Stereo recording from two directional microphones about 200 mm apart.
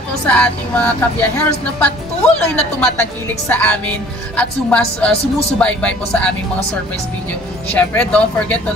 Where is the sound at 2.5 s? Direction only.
5° left (ahead or behind).